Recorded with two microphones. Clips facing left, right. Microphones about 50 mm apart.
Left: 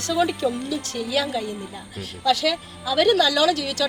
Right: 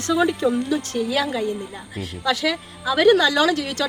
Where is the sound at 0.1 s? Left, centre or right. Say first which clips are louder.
Right 2 dB; centre.